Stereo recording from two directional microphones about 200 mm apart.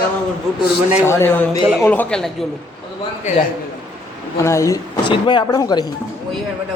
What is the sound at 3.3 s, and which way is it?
Speech, 35° left (ahead or behind).